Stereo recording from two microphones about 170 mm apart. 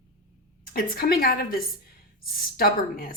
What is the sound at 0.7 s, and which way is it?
Speech, 60° left (ahead or behind).